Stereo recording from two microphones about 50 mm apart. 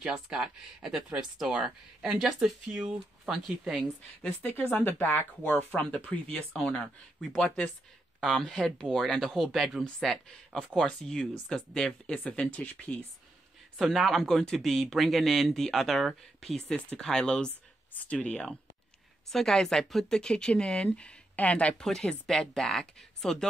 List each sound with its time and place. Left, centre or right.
0.3 s speech: centre
3.3 s speech: centre
4.4 s speech: left
6.2 s speech: centre
9.8 s speech: centre
12.1 s speech: left
13.7 s speech: centre
17.9 s speech: left
21.7 s speech: centre